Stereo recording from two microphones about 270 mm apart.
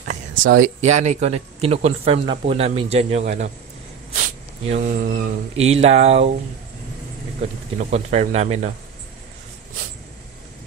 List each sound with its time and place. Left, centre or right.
0.3 s a sound: right
0.6 s speech: right
7.7 s speech: right